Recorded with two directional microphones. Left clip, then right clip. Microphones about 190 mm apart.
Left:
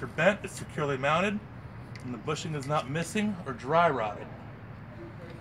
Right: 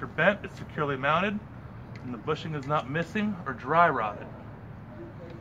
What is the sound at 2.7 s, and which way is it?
Speech, 60° left (ahead or behind).